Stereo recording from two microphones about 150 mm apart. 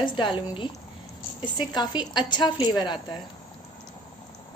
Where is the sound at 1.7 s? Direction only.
30° left (ahead or behind).